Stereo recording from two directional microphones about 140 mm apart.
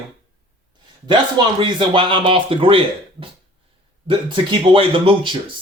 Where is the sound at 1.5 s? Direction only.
35° right (ahead or behind).